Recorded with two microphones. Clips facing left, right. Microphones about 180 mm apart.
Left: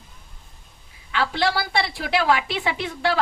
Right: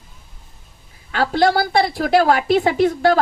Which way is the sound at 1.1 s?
45° right (ahead or behind).